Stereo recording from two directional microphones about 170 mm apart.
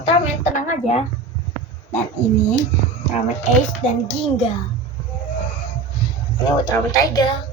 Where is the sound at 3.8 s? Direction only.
35° left (ahead or behind).